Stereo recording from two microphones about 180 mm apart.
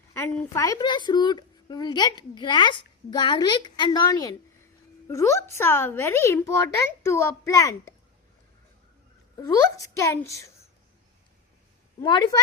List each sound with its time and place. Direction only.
0.1 s a woman's voice: 15° left (ahead or behind)
9.4 s a woman's voice: 20° left (ahead or behind)
12.0 s speech: 25° left (ahead or behind)